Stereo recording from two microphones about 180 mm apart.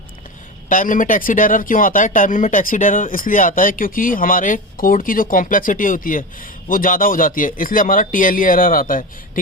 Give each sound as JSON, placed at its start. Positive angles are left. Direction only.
{"t": 0.7, "sound": "speech", "side_deg": 50}